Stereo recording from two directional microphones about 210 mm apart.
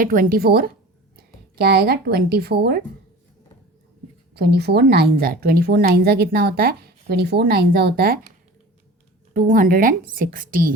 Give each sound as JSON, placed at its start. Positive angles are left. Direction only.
{"t": 0.0, "sound": "a woman's voice", "side_deg": -40}
{"t": 4.4, "sound": "a woman's voice", "side_deg": -50}
{"t": 9.3, "sound": "a woman's voice", "side_deg": -40}